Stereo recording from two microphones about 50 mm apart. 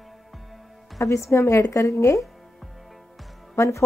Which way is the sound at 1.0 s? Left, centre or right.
Left.